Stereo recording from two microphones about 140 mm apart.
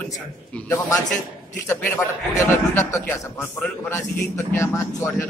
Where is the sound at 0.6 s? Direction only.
20° left (ahead or behind).